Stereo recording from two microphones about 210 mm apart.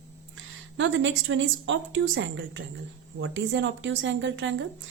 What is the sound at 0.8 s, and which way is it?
A woman's voice, 65° right (ahead or behind).